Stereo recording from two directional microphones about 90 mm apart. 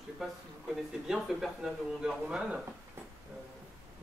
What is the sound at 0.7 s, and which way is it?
Speech, 5° right (ahead or behind).